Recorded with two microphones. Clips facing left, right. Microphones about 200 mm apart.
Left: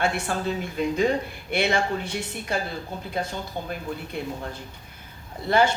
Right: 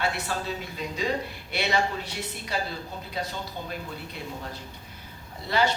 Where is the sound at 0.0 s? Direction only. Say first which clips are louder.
Left 4 dB; 50° left (ahead or behind).